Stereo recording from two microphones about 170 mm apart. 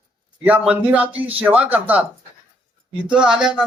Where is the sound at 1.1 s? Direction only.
35° right (ahead or behind).